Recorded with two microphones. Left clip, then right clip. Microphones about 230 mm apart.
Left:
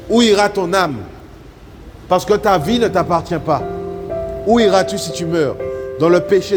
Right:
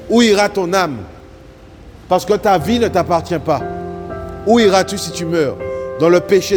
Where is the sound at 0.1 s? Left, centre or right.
Right.